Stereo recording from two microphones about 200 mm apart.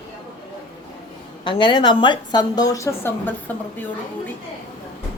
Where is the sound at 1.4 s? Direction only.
25° left (ahead or behind).